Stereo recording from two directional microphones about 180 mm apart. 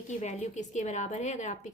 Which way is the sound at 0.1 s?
40° left (ahead or behind).